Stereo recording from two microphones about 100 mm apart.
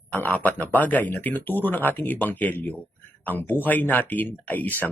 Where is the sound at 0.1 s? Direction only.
15° left (ahead or behind).